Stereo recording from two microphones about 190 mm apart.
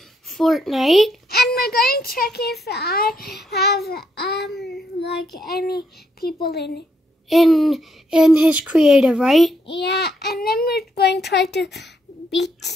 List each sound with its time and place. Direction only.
0.3 s speech: centre (ahead or behind)
1.3 s a child's voice: 55° left (ahead or behind)
7.2 s speech: centre (ahead or behind)
9.7 s a child's voice: 65° left (ahead or behind)